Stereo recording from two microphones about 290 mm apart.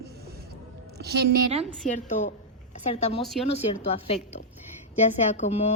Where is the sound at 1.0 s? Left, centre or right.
Right.